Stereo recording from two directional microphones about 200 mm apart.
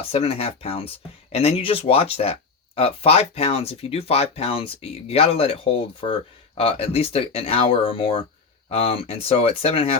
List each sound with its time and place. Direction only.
0.1 s speech: 30° left (ahead or behind)